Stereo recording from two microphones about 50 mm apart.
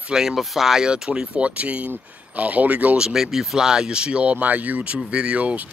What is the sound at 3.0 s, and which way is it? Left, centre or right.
Speech, centre.